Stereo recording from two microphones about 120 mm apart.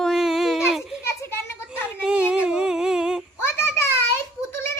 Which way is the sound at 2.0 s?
5° right (ahead or behind).